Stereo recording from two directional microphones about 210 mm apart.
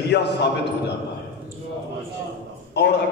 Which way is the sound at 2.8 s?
55° left (ahead or behind).